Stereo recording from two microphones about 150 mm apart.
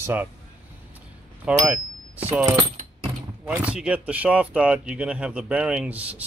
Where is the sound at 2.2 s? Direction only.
10° right (ahead or behind).